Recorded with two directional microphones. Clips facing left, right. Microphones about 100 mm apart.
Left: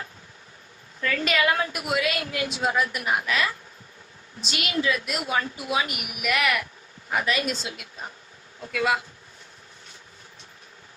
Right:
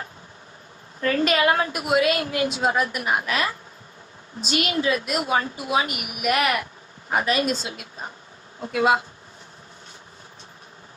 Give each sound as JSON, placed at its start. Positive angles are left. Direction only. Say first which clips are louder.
{"t": 1.0, "sound": "a woman's voice", "louder": "right 4 dB", "side_deg": -40}
{"t": 8.6, "sound": "speech", "louder": "right 5 dB", "side_deg": -25}